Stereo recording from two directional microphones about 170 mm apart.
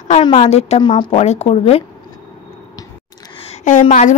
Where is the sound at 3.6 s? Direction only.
45° left (ahead or behind).